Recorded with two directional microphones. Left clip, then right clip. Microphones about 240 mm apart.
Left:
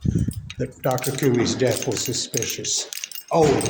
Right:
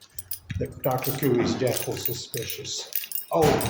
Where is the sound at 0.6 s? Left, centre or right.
Left.